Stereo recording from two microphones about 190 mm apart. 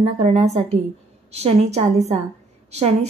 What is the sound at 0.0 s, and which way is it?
A woman's voice, 35° right (ahead or behind).